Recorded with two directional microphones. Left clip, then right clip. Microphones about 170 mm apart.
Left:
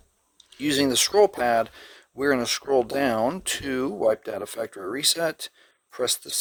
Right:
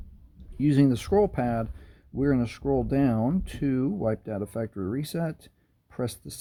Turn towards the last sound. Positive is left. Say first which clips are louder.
# left 7 dB
turn(degrees=25)  # may be behind; listen again after turning